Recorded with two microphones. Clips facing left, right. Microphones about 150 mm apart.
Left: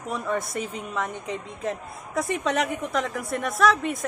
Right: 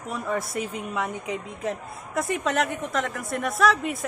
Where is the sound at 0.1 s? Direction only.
5° right (ahead or behind).